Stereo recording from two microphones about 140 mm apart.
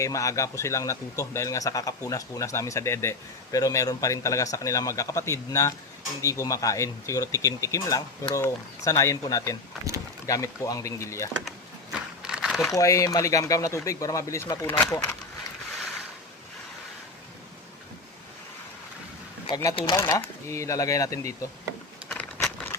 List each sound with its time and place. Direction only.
0.0 s speech: 25° left (ahead or behind)
11.4 s a sound: 5° right (ahead or behind)
12.7 s speech: 25° left (ahead or behind)
19.7 s speech: 30° left (ahead or behind)
20.0 s speech: 20° left (ahead or behind)
22.1 s a sound: 5° left (ahead or behind)